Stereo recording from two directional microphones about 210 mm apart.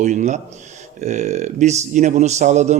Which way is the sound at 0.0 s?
35° right (ahead or behind).